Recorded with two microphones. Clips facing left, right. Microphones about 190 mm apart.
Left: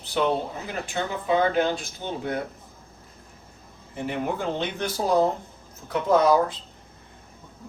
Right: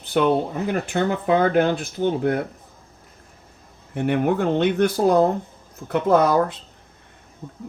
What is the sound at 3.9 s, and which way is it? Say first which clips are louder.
Speech: right 8 dB; 60° right (ahead or behind).